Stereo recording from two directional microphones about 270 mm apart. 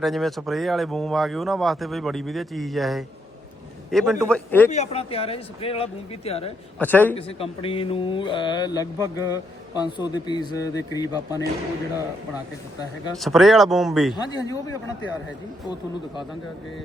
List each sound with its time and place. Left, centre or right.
0.0 s speech: centre
4.7 s speech: left
6.7 s a man's voice: centre
7.2 s a man's voice: left
13.1 s speech: centre
14.2 s a man's voice: centre